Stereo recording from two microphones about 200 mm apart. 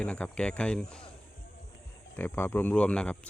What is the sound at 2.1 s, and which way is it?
Speech, 10° left (ahead or behind).